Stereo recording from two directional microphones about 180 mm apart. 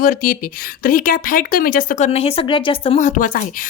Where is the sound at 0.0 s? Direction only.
50° left (ahead or behind).